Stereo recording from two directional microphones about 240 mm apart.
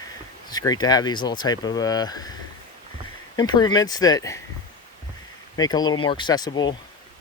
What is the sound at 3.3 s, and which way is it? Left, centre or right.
Speech, centre.